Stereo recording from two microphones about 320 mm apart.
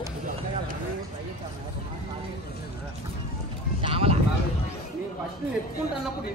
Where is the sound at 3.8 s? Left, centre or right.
Centre.